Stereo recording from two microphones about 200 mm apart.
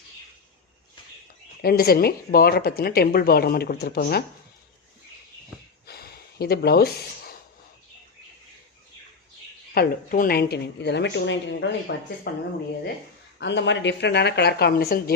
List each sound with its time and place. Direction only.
1.6 s speech: 50° left (ahead or behind)
5.8 s a sound: 50° left (ahead or behind)
9.7 s speech: 45° left (ahead or behind)
13.4 s speech: 60° left (ahead or behind)